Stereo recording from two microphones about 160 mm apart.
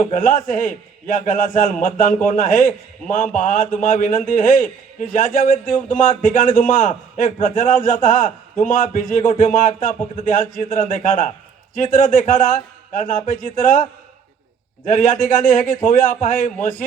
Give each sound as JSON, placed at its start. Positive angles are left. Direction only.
{"t": 0.0, "sound": "a man's voice", "side_deg": 55}
{"t": 14.8, "sound": "a man's voice", "side_deg": 55}